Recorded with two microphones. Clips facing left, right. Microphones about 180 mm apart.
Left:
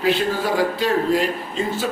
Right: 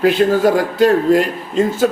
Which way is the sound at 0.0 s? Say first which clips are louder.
Right 8 dB; 50° right (ahead or behind).